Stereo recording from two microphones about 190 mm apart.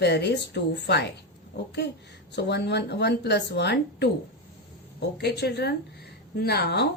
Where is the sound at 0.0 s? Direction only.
60° left (ahead or behind).